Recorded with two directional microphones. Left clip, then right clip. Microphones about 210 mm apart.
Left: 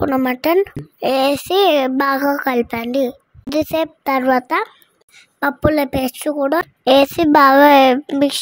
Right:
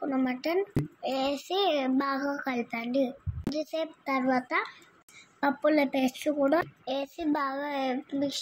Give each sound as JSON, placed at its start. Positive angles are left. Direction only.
{"t": 0.0, "sound": "speech", "side_deg": 50}